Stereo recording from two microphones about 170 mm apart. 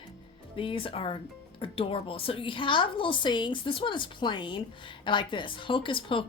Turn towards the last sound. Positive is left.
turn(degrees=30)  # may be behind; listen again after turning